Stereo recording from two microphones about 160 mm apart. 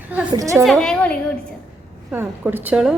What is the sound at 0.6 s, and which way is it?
Speech, 5° left (ahead or behind).